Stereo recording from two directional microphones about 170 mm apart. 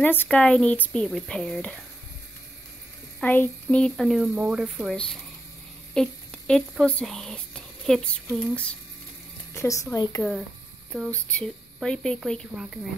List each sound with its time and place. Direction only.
0.0 s speech: 10° left (ahead or behind)
3.2 s a child's voice: 10° left (ahead or behind)
10.9 s speech: 5° left (ahead or behind)